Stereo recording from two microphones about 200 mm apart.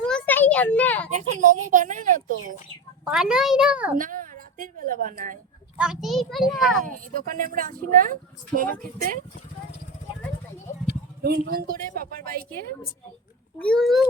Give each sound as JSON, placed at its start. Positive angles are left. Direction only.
{"t": 0.0, "sound": "a sound", "side_deg": 5}
{"t": 1.1, "sound": "a child's voice", "side_deg": -40}
{"t": 3.0, "sound": "a child's voice", "side_deg": -5}
{"t": 3.9, "sound": "a woman's voice", "side_deg": -45}
{"t": 5.7, "sound": "a child's voice", "side_deg": -5}
{"t": 6.8, "sound": "speech", "side_deg": -45}
{"t": 11.2, "sound": "speech", "side_deg": -50}
{"t": 13.6, "sound": "a child's voice", "side_deg": 5}